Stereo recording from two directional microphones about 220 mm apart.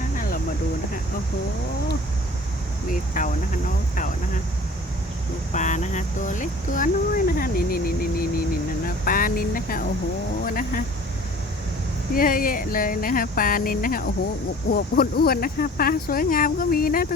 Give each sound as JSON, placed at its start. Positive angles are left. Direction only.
{"t": 2.9, "sound": "speech", "side_deg": 35}
{"t": 5.5, "sound": "speech", "side_deg": 35}
{"t": 12.1, "sound": "speech", "side_deg": 40}